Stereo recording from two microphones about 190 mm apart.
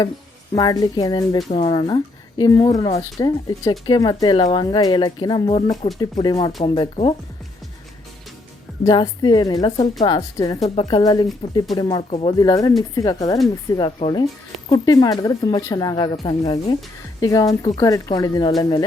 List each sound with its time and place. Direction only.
0.5 s speech: 20° left (ahead or behind)
8.8 s speech: 20° left (ahead or behind)